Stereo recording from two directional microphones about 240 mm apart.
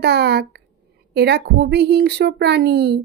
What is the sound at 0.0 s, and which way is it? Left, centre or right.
Speech, right.